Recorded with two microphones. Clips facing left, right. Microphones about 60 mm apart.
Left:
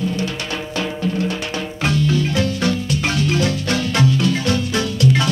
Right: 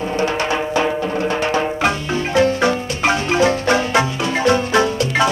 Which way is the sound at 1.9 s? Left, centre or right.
Right.